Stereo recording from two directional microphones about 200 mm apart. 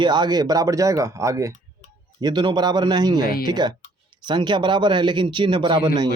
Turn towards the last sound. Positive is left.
turn(degrees=-20)  # may be behind; listen again after turning